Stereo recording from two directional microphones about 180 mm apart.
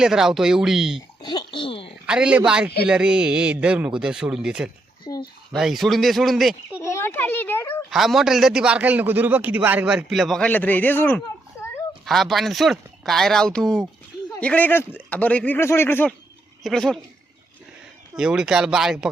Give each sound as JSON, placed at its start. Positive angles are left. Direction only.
{"t": 0.0, "sound": "a man's voice", "side_deg": -5}
{"t": 1.2, "sound": "speech", "side_deg": 25}
{"t": 2.0, "sound": "a man's voice", "side_deg": -5}
{"t": 5.0, "sound": "speech", "side_deg": 20}
{"t": 5.5, "sound": "a man's voice", "side_deg": 0}
{"t": 6.8, "sound": "a child's voice", "side_deg": 15}
{"t": 7.9, "sound": "a man's voice", "side_deg": 0}
{"t": 18.2, "sound": "a man's voice", "side_deg": -5}